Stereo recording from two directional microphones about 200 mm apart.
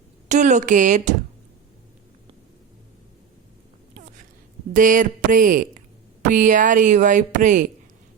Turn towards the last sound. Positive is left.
turn(degrees=-40)  # may be behind; listen again after turning